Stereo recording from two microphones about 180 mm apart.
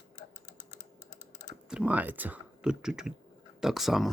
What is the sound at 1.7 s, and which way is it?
Speech, 5° right (ahead or behind).